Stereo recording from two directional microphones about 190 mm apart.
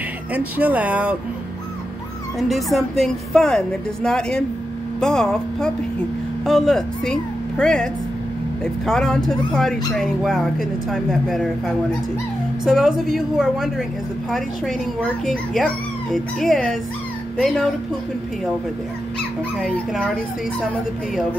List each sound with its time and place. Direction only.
0.3 s speech: 10° right (ahead or behind)
2.3 s speech: centre (ahead or behind)
19.1 s speech: centre (ahead or behind)